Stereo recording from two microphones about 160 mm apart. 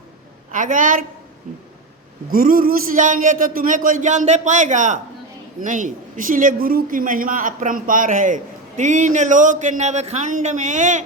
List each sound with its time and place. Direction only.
0.5 s a woman's voice: 55° right (ahead or behind)